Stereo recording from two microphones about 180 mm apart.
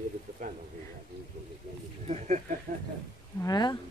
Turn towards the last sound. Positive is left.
turn(degrees=20)  # may be behind; listen again after turning